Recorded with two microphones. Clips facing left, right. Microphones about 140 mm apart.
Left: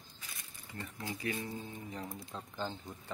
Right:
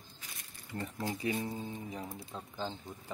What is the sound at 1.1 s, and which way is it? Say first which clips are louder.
Speech: right 2 dB; 20° right (ahead or behind).